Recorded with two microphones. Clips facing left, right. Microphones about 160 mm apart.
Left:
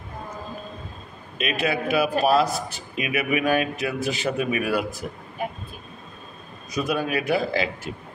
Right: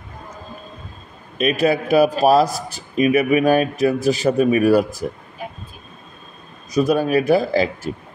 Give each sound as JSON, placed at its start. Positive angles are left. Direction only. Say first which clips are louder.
{"t": 1.4, "sound": "a man's voice", "louder": "right 7 dB", "side_deg": -40}
{"t": 6.7, "sound": "a man's voice", "louder": "right 8 dB", "side_deg": -40}